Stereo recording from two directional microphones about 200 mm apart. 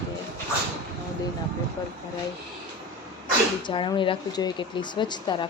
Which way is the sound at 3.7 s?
25° left (ahead or behind).